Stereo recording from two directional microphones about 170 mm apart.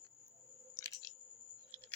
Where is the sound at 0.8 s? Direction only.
20° left (ahead or behind).